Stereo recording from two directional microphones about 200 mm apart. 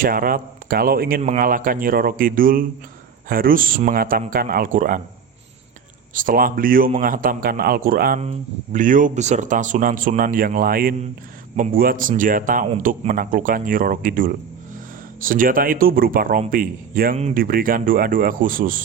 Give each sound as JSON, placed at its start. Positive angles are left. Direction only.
{"t": 0.0, "sound": "a man's voice", "side_deg": -45}
{"t": 6.1, "sound": "a man's voice", "side_deg": -45}
{"t": 8.2, "sound": "a man's voice", "side_deg": -35}